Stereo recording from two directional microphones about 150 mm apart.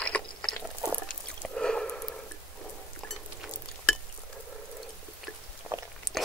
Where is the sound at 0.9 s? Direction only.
5° left (ahead or behind).